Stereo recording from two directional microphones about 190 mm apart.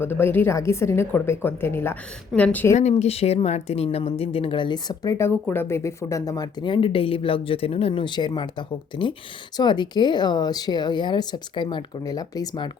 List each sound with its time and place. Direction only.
0.0 s a woman's voice: 10° left (ahead or behind)
2.7 s speech: 35° left (ahead or behind)